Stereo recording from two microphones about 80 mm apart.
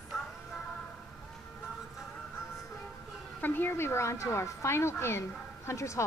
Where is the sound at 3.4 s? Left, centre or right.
Left.